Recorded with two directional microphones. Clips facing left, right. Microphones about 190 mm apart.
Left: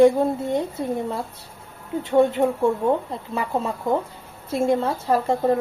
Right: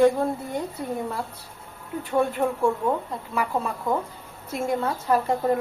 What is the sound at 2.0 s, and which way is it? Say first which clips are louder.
Speech: left 5 dB; 20° left (ahead or behind).